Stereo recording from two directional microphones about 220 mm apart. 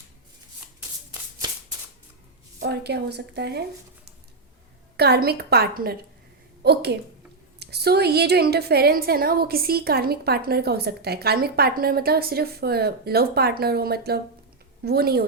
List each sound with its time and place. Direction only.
0.8 s shuffling cards: 15° right (ahead or behind)
2.6 s speech: 50° right (ahead or behind)
4.9 s a woman's voice: 45° right (ahead or behind)